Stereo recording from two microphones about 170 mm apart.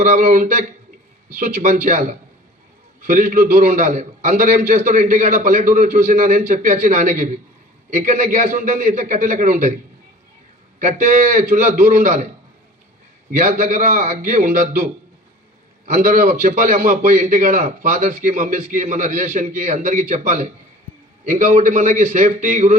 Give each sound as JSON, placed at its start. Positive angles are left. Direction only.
{"t": 0.0, "sound": "a man's voice", "side_deg": -45}
{"t": 10.8, "sound": "a man's voice", "side_deg": -50}
{"t": 13.3, "sound": "a man's voice", "side_deg": -45}
{"t": 15.9, "sound": "a man's voice", "side_deg": -55}